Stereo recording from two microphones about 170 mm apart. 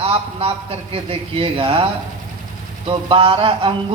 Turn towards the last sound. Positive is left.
turn(degrees=-30)  # may be behind; listen again after turning